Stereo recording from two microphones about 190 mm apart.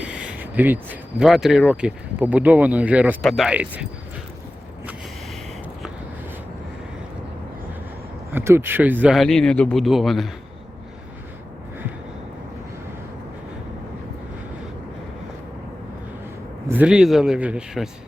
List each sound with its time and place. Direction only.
0.0 s speech: 5° right (ahead or behind)
8.3 s speech: 10° right (ahead or behind)
16.6 s speech: 5° right (ahead or behind)